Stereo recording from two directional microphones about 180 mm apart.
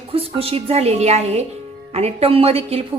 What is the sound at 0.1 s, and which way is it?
Speech, 30° right (ahead or behind).